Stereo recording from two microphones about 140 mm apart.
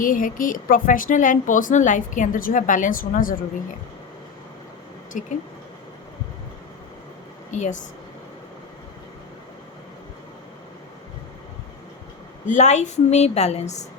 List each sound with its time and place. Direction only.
0.0 s a woman's voice: 75° left (ahead or behind); by 3.3 s 90° left
7.5 s speech: 55° left (ahead or behind)
12.5 s a woman's voice: 55° left (ahead or behind)